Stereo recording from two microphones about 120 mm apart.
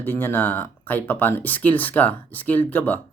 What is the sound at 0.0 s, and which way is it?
Speech, 15° left (ahead or behind).